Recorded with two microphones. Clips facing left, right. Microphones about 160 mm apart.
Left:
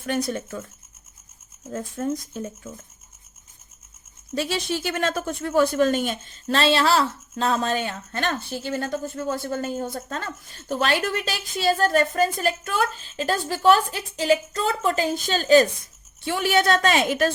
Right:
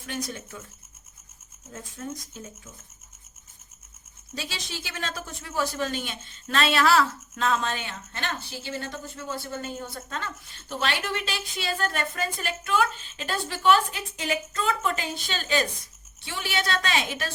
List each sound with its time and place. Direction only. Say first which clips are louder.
0.0 s speech: left 8 dB; 60° left (ahead or behind)
2.0 s speech: left 9 dB; 60° left (ahead or behind)
4.4 s speech: left 11 dB; 55° left (ahead or behind)
6.5 s a woman's voice: left 2 dB; 30° left (ahead or behind)
16.2 s a woman's voice: left 10 dB; 50° left (ahead or behind)